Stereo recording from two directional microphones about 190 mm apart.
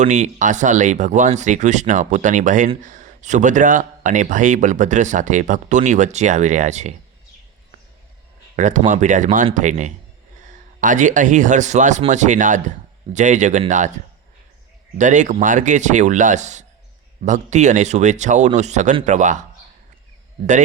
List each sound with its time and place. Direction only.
0.0 s speech: 40° right (ahead or behind)
8.5 s speech: 40° right (ahead or behind)
14.9 s speech: 40° right (ahead or behind)